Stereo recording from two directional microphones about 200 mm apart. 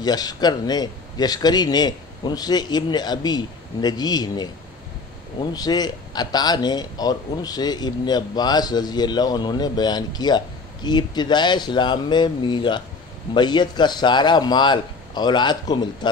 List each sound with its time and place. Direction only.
0.0 s a man's voice: 20° left (ahead or behind)